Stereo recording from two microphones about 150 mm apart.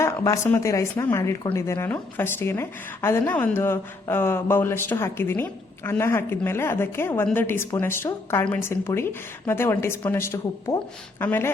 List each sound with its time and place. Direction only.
0.0 s a woman's voice: 20° left (ahead or behind)